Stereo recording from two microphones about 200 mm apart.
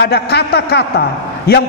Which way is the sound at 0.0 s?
55° left (ahead or behind).